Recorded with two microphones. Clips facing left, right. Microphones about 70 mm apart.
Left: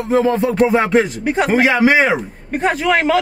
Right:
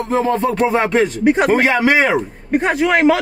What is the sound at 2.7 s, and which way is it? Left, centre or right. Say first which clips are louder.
Speech: right 4 dB; centre.